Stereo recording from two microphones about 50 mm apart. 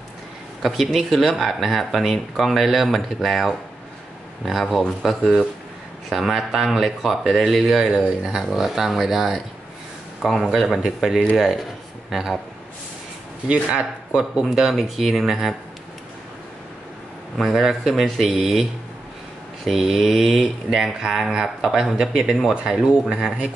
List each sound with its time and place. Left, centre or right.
0.6 s speech: centre
7.8 s speech: centre
10.4 s speech: centre
13.5 s speech: right
14.5 s speech: centre
17.4 s speech: centre
22.5 s speech: right